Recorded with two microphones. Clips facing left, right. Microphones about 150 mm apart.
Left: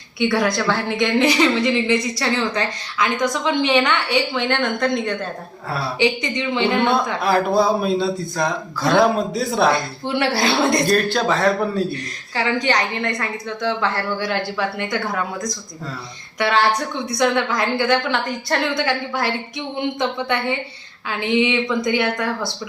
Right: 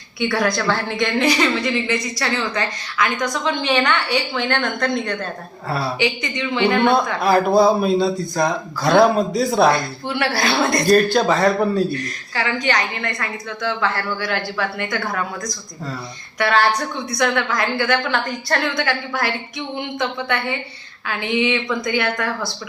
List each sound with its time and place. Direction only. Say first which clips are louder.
0.2 s a woman's voice: left 1 dB; 20° left (ahead or behind)
7.2 s speech: right 4 dB; centre (ahead or behind)
10.2 s a woman's voice: left 2 dB; 25° left (ahead or behind)
10.8 s speech: right 3 dB; 5° right (ahead or behind)
12.6 s a woman's voice: left 1 dB; 20° left (ahead or behind)
17.1 s a woman's voice: left 2 dB; 20° left (ahead or behind)